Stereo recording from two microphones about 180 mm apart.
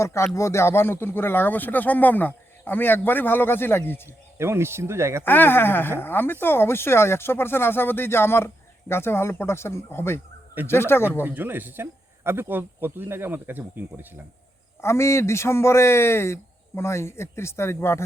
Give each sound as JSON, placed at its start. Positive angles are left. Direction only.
{"t": 0.0, "sound": "speech", "side_deg": 15}
{"t": 4.4, "sound": "speech", "side_deg": -15}
{"t": 5.2, "sound": "speech", "side_deg": 10}
{"t": 11.2, "sound": "speech", "side_deg": -10}
{"t": 14.8, "sound": "speech", "side_deg": 15}